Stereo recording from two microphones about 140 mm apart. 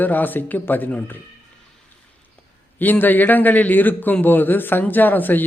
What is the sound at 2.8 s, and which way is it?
A man's voice, 15° left (ahead or behind).